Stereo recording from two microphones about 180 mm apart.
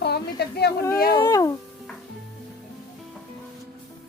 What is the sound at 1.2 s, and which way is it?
Music, 20° left (ahead or behind).